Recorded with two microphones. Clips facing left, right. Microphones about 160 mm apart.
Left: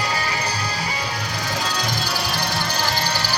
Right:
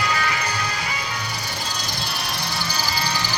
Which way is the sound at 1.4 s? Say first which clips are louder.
Left 6 dB; 90° left.